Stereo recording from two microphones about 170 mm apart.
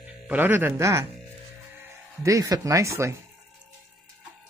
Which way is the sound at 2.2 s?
20° right (ahead or behind).